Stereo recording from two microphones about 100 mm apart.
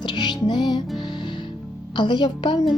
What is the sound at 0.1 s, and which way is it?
Music, 50° left (ahead or behind).